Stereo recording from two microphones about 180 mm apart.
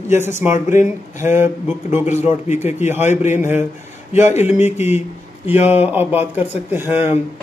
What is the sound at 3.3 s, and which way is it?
Speech, 10° right (ahead or behind).